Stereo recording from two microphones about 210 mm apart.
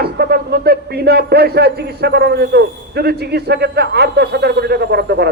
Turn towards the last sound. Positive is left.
turn(degrees=-50)  # may be behind; listen again after turning